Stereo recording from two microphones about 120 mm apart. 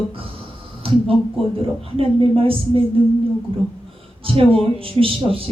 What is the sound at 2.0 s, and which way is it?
Speech, 50° right (ahead or behind).